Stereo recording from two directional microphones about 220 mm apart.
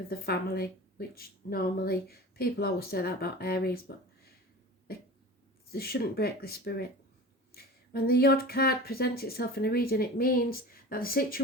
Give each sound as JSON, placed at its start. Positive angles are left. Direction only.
{"t": 0.1, "sound": "a woman's voice", "side_deg": 45}
{"t": 5.7, "sound": "a woman's voice", "side_deg": 45}